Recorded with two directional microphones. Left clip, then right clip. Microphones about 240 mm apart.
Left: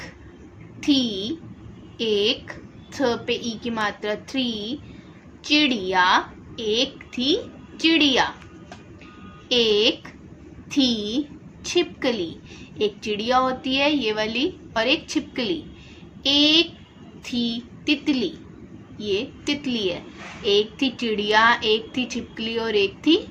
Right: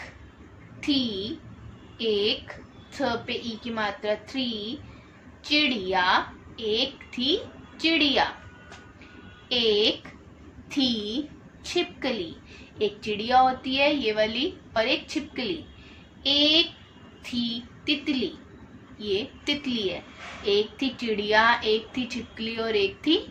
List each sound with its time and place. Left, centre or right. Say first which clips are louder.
0.8 s a woman's voice: left 5 dB; left
9.5 s a woman's voice: left 4 dB; left